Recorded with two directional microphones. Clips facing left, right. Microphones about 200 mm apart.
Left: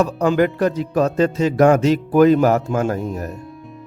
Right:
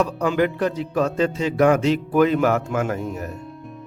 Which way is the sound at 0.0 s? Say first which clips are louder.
Left 4 dB; 45° left (ahead or behind).